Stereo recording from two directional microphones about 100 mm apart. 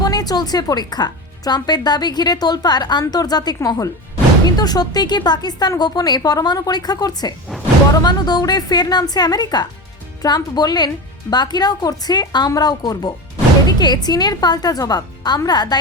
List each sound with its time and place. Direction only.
0.0 s a woman's voice: 40° left (ahead or behind)